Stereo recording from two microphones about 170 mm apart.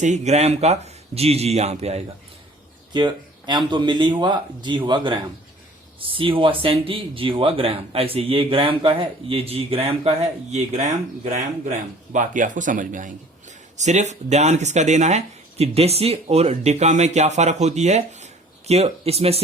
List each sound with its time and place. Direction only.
0.0 s speech: 40° right (ahead or behind)
2.9 s speech: 25° right (ahead or behind)